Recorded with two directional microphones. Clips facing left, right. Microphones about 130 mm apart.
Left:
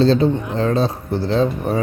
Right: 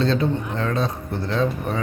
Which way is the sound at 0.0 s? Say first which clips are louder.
Left 6 dB; 30° left (ahead or behind).